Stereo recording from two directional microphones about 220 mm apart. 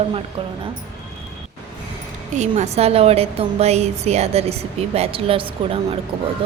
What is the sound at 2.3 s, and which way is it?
A woman's voice, 30° right (ahead or behind).